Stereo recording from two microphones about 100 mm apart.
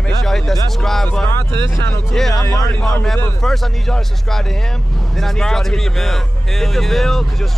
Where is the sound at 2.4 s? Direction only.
40° left (ahead or behind).